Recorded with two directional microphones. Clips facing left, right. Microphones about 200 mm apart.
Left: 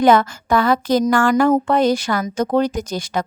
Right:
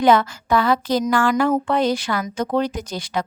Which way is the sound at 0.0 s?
45° left (ahead or behind).